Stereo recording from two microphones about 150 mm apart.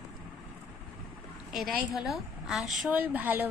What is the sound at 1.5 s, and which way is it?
A woman's voice, centre (ahead or behind).